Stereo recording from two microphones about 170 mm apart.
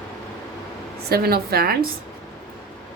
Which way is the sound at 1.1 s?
65° right (ahead or behind).